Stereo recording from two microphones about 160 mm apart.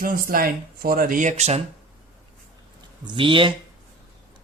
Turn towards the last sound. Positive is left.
turn(degrees=-30)  # may be behind; listen again after turning